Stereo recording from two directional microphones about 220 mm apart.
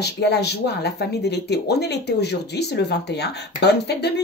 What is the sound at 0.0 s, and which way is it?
Speech, 50° left (ahead or behind).